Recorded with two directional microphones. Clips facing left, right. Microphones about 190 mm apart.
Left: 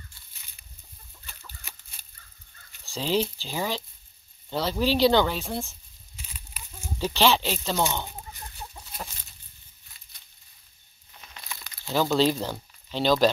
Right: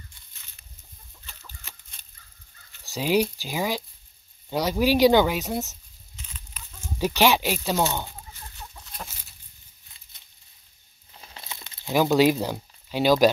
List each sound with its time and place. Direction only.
1.6 s chicken: 10° left (ahead or behind)
2.9 s speech: 10° right (ahead or behind)
6.1 s a sound: 10° left (ahead or behind)
7.0 s speech: 10° right (ahead or behind)
8.7 s chicken: 10° left (ahead or behind)
11.1 s crumpling: 30° right (ahead or behind); by 13.3 s 10° right (ahead or behind)